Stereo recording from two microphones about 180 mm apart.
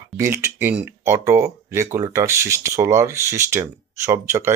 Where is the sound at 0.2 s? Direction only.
15° right (ahead or behind).